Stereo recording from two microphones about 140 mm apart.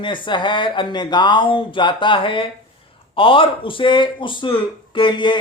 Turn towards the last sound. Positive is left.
turn(degrees=35)  # may be behind; listen again after turning